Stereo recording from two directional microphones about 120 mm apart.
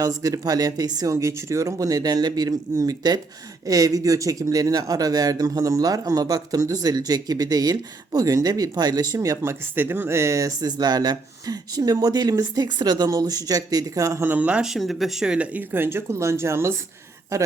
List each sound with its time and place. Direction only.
0.0 s speech: 30° right (ahead or behind)